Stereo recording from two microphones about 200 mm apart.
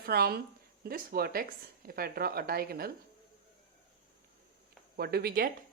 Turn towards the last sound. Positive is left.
turn(degrees=-50)  # may be behind; listen again after turning